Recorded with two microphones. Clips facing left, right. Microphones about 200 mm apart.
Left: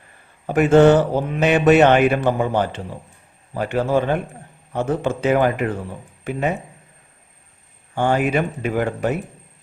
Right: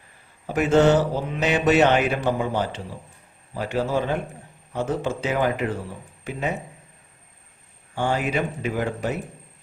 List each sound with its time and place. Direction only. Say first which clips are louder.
0.4 s mantra: left 5 dB; 55° left (ahead or behind)
7.9 s mantra: left 5 dB; 55° left (ahead or behind)